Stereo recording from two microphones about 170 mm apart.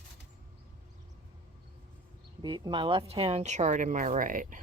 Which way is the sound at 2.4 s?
25° right (ahead or behind).